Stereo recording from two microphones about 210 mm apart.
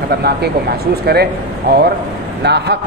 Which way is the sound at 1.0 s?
50° right (ahead or behind).